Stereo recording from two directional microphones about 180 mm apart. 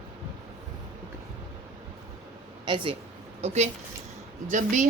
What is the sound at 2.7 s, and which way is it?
Speech, 25° right (ahead or behind).